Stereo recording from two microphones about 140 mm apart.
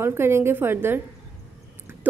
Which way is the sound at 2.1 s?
10° right (ahead or behind).